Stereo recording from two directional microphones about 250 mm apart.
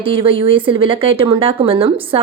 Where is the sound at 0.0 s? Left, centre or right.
Right.